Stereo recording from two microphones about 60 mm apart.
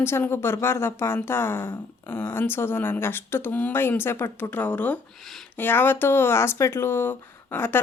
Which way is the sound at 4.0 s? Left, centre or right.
Left.